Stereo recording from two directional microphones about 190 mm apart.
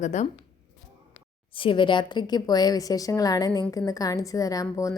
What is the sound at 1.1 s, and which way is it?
A woman's voice, 25° left (ahead or behind).